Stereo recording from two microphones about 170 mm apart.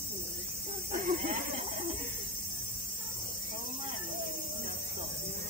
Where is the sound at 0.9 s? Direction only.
50° right (ahead or behind).